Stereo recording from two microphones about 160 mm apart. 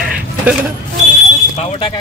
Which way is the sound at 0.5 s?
10° right (ahead or behind).